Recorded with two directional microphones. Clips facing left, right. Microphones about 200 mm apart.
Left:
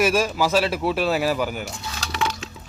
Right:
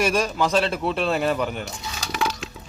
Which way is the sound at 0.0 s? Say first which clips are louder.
Left 2 dB; 5° left (ahead or behind).